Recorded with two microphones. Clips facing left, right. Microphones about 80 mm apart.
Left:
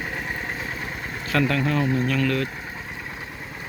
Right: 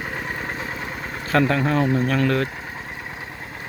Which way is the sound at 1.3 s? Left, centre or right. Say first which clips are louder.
Right 3 dB; right.